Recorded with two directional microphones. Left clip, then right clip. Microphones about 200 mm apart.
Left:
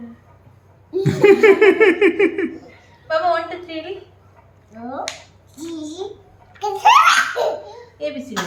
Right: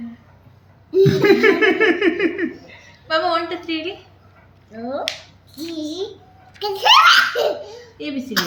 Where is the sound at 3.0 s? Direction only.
25° left (ahead or behind).